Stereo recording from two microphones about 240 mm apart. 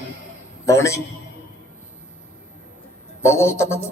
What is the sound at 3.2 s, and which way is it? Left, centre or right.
Speech, centre.